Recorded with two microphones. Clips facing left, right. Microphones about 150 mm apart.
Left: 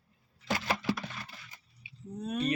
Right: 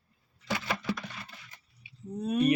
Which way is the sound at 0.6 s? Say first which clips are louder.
Left 3 dB; 5° left (ahead or behind).